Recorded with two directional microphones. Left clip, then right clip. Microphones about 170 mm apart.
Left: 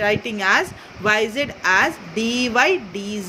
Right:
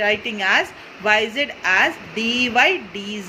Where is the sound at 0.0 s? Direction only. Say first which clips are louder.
Even; 55° left (ahead or behind).